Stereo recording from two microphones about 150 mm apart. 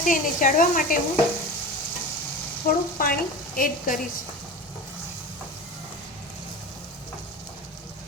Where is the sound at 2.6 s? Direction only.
75° left (ahead or behind).